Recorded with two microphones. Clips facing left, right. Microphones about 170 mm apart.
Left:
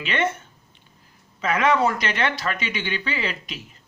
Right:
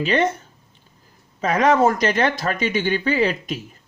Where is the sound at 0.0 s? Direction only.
35° right (ahead or behind).